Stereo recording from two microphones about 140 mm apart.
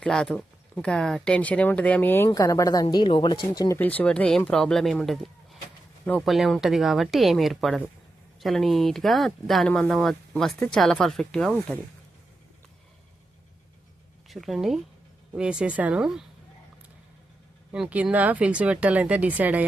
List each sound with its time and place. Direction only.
0.0 s speech: 5° left (ahead or behind); by 2.8 s 25° left (ahead or behind)
2.8 s speech: 35° left (ahead or behind)
3.8 s speech: 10° left (ahead or behind)
14.3 s speech: centre (ahead or behind)
17.7 s speech: 10° right (ahead or behind)